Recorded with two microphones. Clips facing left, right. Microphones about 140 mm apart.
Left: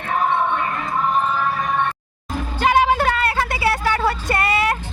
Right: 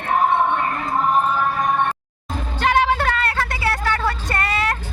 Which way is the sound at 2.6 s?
5° left (ahead or behind).